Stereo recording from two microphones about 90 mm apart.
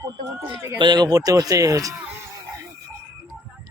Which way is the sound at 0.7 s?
55° right (ahead or behind).